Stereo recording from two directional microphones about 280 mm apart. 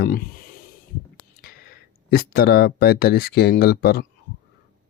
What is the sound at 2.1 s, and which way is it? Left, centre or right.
Speech, left.